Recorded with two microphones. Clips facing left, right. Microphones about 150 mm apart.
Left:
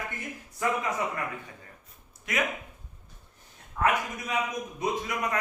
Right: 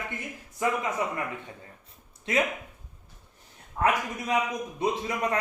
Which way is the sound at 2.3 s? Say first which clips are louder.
Right 4 dB; 30° right (ahead or behind).